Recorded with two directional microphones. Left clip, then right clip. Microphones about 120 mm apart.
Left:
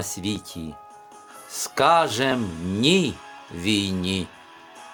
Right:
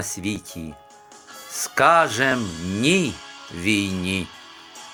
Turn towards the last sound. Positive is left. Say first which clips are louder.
# right 1 dB
turn(degrees=15)  # may be behind; listen again after turning